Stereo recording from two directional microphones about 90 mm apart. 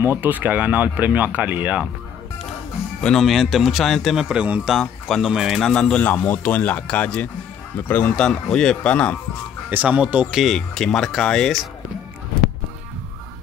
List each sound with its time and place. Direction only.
0.0 s speech: 25° right (ahead or behind)
3.0 s speech: 5° left (ahead or behind)
4.3 s speech: 15° right (ahead or behind)
4.6 s speech: 5° left (ahead or behind)
6.0 s speech: 20° left (ahead or behind)
9.7 s speech: 15° right (ahead or behind)
10.3 s speech: centre (ahead or behind)